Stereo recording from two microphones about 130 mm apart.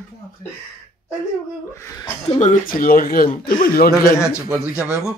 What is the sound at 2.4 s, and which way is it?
Speech, 90° left.